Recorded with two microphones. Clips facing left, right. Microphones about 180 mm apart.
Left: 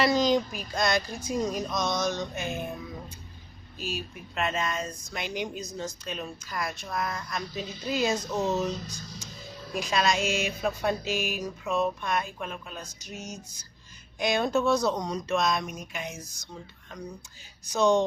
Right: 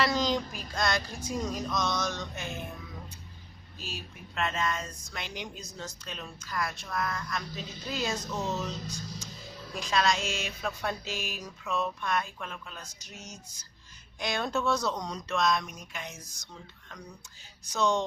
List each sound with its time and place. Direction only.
0.0 s speech: 15° left (ahead or behind)
3.8 s speech: 15° left (ahead or behind)
9.7 s speech: 15° left (ahead or behind)
17.7 s speech: 15° left (ahead or behind)